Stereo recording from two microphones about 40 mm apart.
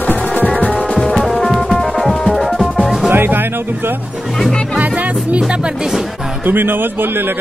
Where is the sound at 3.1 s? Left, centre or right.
Right.